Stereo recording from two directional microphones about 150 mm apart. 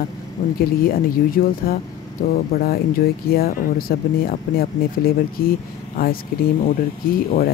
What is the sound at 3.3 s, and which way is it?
Speech, 85° left.